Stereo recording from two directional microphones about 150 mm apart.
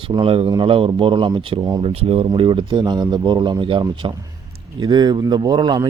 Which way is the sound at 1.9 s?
40° right (ahead or behind).